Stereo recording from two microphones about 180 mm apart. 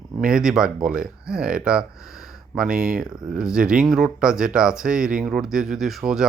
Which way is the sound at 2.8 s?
55° right (ahead or behind).